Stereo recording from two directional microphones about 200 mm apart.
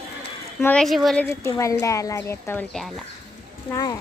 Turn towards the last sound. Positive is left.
turn(degrees=15)  # may be behind; listen again after turning